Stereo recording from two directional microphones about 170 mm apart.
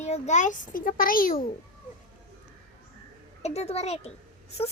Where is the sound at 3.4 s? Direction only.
40° left (ahead or behind).